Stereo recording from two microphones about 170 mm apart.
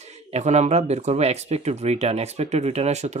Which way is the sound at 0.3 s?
40° right (ahead or behind).